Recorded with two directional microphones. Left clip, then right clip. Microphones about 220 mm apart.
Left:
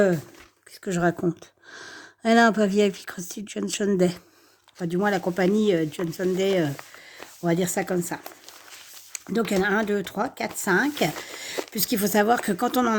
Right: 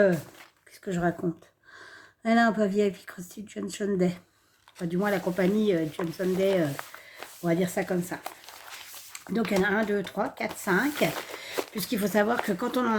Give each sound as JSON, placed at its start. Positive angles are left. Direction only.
{"t": 0.9, "sound": "speech", "side_deg": 45}